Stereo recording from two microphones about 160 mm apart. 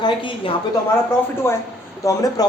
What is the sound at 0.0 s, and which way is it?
Speech, 30° left (ahead or behind).